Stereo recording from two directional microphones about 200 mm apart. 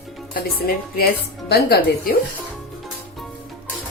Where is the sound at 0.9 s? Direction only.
50° left (ahead or behind).